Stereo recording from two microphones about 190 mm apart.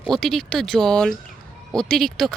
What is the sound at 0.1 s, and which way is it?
Speech, 5° left (ahead or behind).